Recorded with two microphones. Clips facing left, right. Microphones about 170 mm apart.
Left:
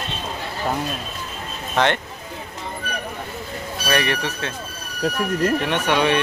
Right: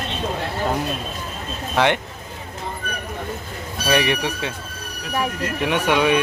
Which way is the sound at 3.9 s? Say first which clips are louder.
Right 2 dB; 15° right (ahead or behind).